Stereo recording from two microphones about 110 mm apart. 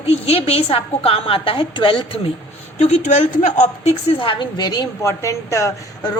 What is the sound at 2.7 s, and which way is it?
A woman's voice, 90° left.